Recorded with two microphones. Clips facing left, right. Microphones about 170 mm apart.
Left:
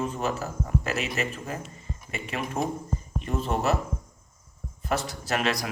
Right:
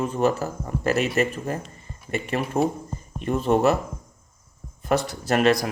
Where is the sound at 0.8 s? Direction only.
50° right (ahead or behind).